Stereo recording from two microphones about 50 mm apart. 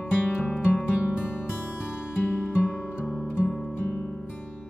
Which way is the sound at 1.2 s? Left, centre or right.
Left.